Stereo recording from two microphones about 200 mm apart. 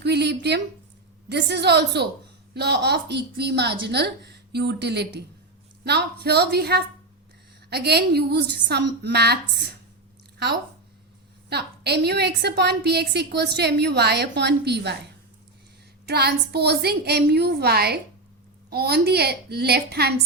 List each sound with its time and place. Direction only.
0.0 s a woman's voice: 55° right (ahead or behind)
11.4 s a woman's voice: 55° right (ahead or behind)
16.0 s a woman's voice: 55° right (ahead or behind)